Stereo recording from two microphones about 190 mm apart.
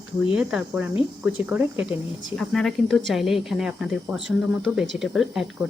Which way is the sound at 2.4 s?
Centre (ahead or behind).